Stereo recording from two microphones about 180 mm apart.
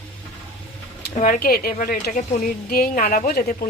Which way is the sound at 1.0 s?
50° left (ahead or behind).